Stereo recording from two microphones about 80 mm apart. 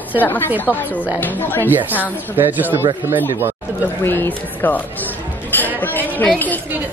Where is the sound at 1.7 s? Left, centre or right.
Right.